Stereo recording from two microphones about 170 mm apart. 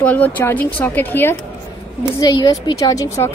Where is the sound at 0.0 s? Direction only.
10° left (ahead or behind).